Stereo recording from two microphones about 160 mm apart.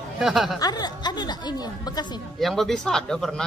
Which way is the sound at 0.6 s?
25° left (ahead or behind).